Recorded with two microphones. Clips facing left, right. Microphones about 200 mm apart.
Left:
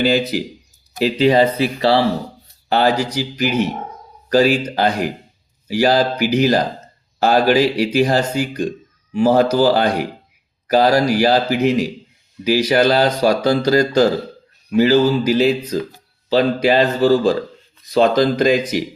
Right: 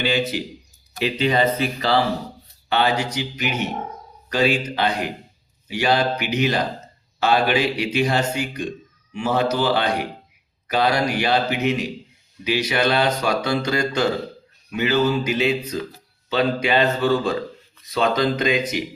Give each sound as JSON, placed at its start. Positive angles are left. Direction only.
{"t": 0.0, "sound": "speech", "side_deg": 40}